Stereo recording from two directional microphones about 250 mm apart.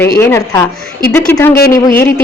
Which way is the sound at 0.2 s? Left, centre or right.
Centre.